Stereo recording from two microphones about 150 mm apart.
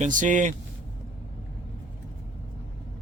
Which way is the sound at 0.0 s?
55° right (ahead or behind).